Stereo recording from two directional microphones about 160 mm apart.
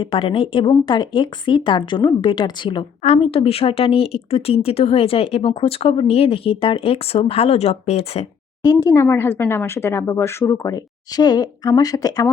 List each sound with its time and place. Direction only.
0.0 s speech: 35° left (ahead or behind)
8.6 s speech: 20° left (ahead or behind)